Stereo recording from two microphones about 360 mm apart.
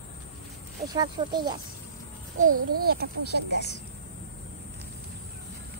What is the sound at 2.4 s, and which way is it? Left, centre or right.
Speech, right.